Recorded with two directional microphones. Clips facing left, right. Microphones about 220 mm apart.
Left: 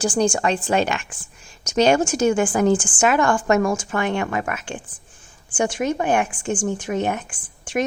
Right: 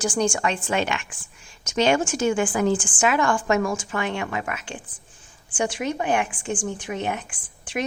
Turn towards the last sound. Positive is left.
turn(degrees=45)  # may be behind; listen again after turning